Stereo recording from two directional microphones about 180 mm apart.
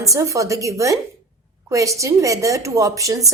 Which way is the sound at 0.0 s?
15° right (ahead or behind).